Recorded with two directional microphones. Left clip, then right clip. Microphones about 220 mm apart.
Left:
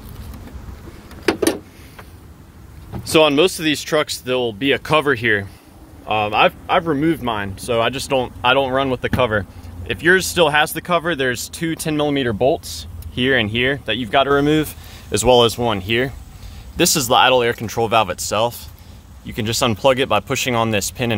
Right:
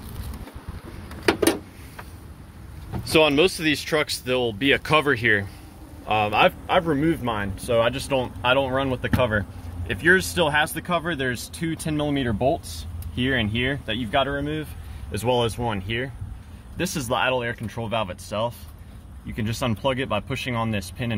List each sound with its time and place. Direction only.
3.0 s speech: 40° left (ahead or behind)
6.0 s speech: 10° left (ahead or behind)
7.0 s speech: 35° left (ahead or behind)